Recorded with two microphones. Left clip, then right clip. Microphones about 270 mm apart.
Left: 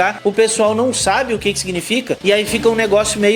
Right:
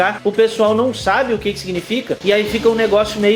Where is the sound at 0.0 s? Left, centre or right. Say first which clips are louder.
Even; left.